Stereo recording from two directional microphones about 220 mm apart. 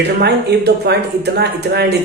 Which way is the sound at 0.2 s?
50° right (ahead or behind).